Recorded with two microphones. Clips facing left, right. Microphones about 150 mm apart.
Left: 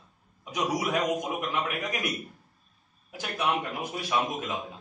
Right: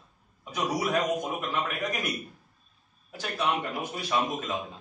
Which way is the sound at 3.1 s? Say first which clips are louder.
Even; 10° left (ahead or behind).